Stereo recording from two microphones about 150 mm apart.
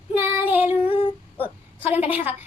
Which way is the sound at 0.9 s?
40° left (ahead or behind).